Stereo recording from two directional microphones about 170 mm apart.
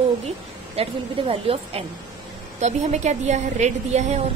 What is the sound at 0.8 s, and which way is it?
A woman's voice, 35° right (ahead or behind).